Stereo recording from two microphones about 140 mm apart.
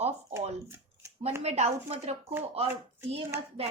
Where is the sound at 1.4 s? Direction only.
50° right (ahead or behind).